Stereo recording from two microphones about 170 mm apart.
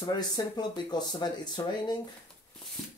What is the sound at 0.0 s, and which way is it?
Speech, 25° left (ahead or behind).